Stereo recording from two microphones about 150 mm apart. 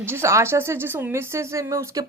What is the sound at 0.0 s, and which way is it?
A woman's voice, 15° right (ahead or behind).